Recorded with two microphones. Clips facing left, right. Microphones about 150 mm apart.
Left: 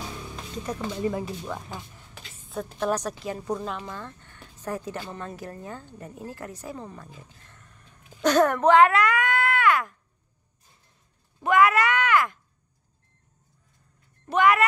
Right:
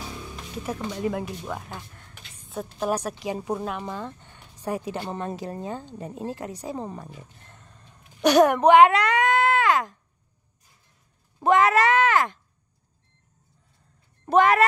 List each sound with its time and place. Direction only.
1.0 s speech: 5° right (ahead or behind)
2.0 s a sound: 5° left (ahead or behind)
2.6 s a woman's voice: 10° right (ahead or behind)
7.0 s roaring cats: 20° right (ahead or behind)
8.2 s speech: 15° right (ahead or behind)
11.4 s speech: 30° right (ahead or behind)
14.3 s speech: 35° right (ahead or behind)